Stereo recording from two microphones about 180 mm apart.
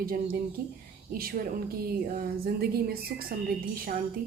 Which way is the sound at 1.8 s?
55° right (ahead or behind).